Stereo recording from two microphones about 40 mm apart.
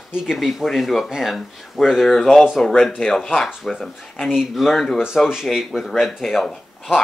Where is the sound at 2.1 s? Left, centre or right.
Centre.